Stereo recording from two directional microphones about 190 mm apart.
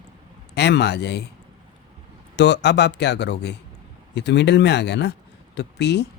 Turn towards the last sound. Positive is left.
turn(degrees=60)  # may be behind; listen again after turning